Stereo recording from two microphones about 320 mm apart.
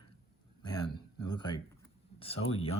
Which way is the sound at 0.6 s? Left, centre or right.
Centre.